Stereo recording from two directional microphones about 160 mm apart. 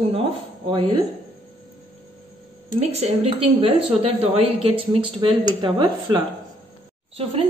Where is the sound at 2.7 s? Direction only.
40° right (ahead or behind).